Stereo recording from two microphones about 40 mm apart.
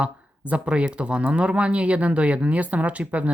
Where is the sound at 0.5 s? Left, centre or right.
Right.